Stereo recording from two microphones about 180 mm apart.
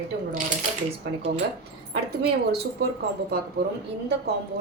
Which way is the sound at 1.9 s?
65° right (ahead or behind).